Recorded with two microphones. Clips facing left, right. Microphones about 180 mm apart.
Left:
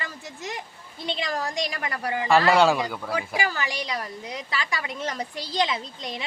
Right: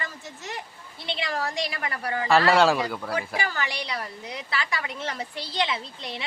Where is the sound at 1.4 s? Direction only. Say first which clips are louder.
Even; 15° left (ahead or behind).